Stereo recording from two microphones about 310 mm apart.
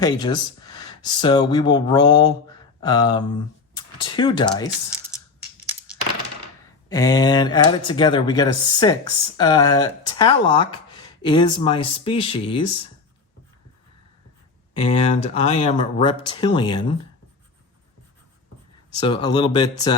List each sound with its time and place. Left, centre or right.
0.0 s speech: centre
6.8 s speech: centre
14.7 s speech: centre
18.9 s speech: centre